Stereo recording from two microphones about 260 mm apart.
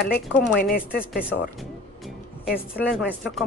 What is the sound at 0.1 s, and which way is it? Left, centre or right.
Speech, left.